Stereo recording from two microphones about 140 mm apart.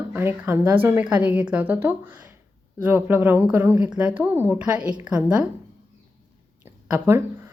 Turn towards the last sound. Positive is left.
turn(degrees=-15)  # may be behind; listen again after turning